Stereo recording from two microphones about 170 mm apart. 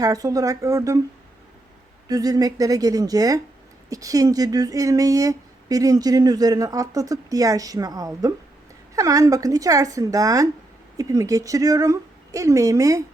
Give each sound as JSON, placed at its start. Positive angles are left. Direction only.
{"t": 0.0, "sound": "speech", "side_deg": -20}
{"t": 2.0, "sound": "speech", "side_deg": -20}